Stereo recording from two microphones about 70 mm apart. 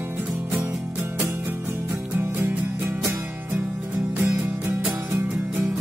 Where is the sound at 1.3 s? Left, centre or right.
Right.